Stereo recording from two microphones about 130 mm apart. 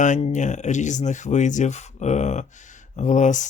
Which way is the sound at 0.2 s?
60° left (ahead or behind).